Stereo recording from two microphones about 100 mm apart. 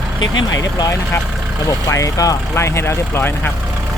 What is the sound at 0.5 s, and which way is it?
Speech, 35° left (ahead or behind).